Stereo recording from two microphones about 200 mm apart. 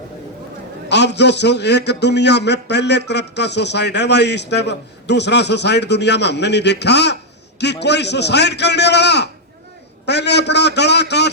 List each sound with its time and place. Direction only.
0.9 s a man's voice: 60° left (ahead or behind)